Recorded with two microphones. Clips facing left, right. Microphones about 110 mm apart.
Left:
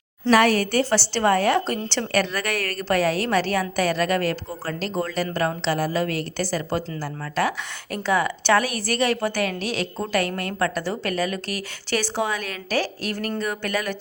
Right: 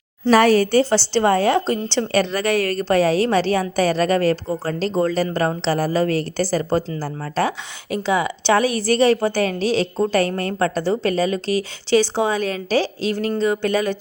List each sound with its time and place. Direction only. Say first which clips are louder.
0.3 s a woman's voice: right 4 dB; 30° right (ahead or behind)
7.9 s a woman's voice: right 2 dB; 20° right (ahead or behind)